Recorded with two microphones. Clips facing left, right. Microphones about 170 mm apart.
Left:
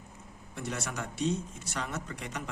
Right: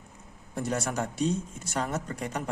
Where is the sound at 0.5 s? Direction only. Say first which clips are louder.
Right 7 dB; 45° right (ahead or behind).